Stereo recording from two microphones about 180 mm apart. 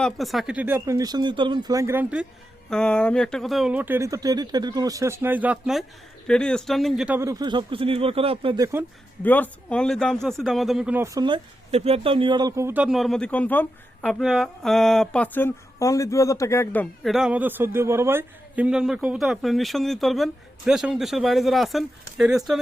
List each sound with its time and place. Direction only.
0.0 s speech: centre (ahead or behind)
2.6 s speech: 5° left (ahead or behind); by 8.6 s 30° right (ahead or behind)
9.2 s speech: 10° left (ahead or behind)